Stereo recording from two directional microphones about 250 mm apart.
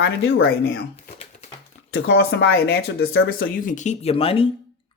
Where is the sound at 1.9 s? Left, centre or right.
Left.